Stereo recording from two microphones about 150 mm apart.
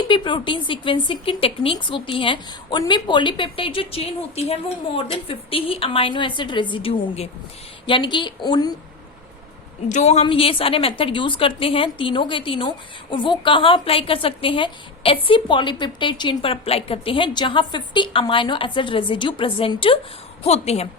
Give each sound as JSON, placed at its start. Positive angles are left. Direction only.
{"t": 0.1, "sound": "a woman's voice", "side_deg": 30}
{"t": 9.9, "sound": "a woman's voice", "side_deg": 50}
{"t": 10.2, "sound": "a woman's voice", "side_deg": 35}